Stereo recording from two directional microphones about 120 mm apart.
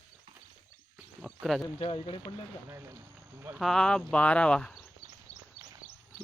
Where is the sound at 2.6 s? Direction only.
20° right (ahead or behind).